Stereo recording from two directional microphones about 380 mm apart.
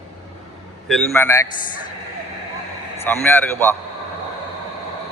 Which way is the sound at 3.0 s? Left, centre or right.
Centre.